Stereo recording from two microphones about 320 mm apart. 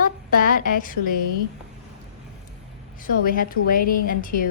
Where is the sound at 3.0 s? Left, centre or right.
Left.